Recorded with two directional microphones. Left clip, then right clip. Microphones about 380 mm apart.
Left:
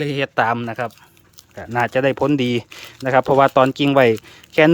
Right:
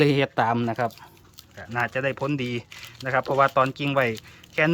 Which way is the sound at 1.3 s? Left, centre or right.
Centre.